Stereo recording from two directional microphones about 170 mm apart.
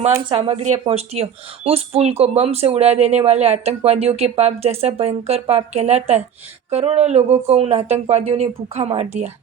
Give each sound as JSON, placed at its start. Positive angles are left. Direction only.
{"t": 0.3, "sound": "speech", "side_deg": -35}